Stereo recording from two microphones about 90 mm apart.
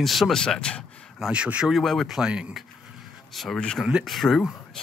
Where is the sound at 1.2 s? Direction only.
10° right (ahead or behind).